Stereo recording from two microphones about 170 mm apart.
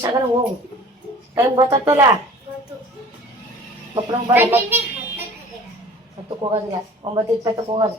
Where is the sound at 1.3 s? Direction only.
15° right (ahead or behind).